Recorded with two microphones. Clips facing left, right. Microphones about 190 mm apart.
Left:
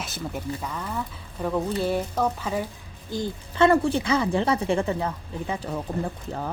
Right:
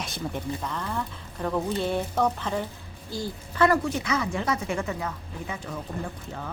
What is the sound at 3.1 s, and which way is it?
Speech, 20° left (ahead or behind).